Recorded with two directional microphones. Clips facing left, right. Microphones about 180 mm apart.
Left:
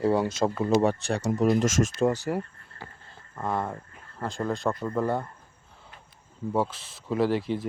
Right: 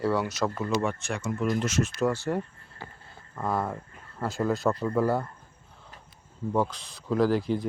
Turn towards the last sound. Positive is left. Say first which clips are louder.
# right 1 dB
turn(degrees=0)  # may be behind; listen again after turning